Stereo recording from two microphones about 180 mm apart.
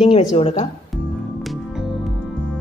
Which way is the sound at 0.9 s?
Centre (ahead or behind).